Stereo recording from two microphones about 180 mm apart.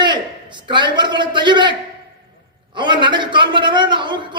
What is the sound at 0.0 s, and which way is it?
A man's voice, 25° right (ahead or behind).